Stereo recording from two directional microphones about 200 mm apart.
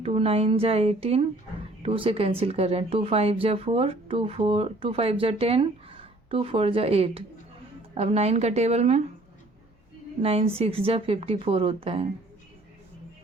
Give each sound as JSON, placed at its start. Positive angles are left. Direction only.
{"t": 0.0, "sound": "a woman's voice", "side_deg": -30}
{"t": 10.2, "sound": "speech", "side_deg": -30}